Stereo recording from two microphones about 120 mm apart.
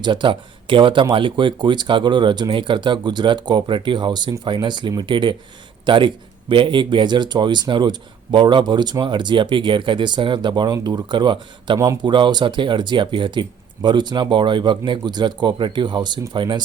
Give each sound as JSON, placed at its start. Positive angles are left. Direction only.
{"t": 0.0, "sound": "speech", "side_deg": -40}